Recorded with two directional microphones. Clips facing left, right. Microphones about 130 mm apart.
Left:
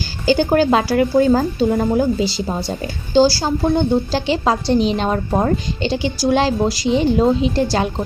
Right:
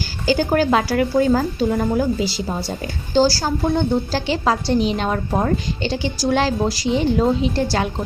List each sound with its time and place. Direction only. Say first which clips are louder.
0.3 s a woman's voice: left 3 dB; 25° left (ahead or behind)